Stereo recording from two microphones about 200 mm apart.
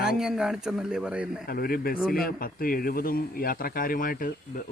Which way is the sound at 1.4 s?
50° left (ahead or behind).